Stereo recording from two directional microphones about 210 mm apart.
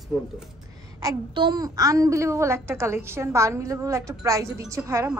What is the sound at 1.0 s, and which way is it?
A woman's voice, 20° right (ahead or behind).